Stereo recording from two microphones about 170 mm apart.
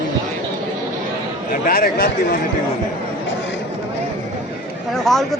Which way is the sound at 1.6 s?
60° left (ahead or behind).